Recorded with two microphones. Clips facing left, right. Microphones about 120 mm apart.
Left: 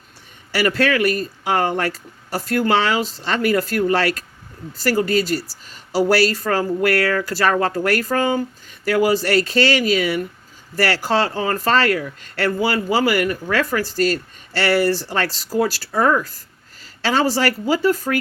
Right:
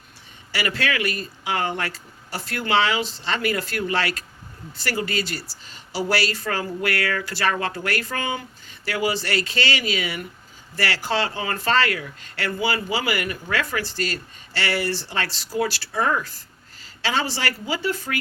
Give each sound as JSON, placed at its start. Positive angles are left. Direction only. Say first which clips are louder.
{"t": 0.5, "sound": "speech", "louder": "left 7 dB", "side_deg": 45}